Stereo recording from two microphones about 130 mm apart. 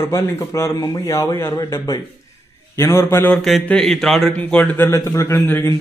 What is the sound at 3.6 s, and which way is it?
Speech, 5° left (ahead or behind).